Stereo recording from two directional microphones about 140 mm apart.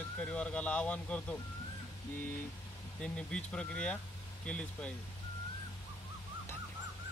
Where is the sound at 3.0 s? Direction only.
10° left (ahead or behind).